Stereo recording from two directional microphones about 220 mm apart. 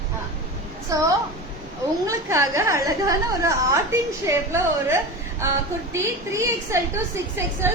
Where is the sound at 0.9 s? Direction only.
15° right (ahead or behind).